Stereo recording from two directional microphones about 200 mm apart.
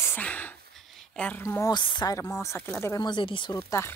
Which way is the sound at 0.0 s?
10° left (ahead or behind).